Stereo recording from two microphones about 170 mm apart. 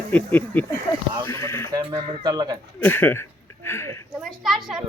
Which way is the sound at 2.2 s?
25° right (ahead or behind).